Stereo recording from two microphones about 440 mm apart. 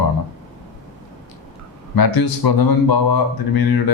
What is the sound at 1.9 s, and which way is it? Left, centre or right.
Speech, left.